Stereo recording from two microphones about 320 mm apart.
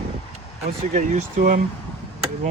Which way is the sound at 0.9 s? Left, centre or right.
Right.